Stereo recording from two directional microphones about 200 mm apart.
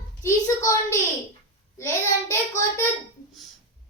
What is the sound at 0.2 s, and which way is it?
A child's voice, 15° left (ahead or behind).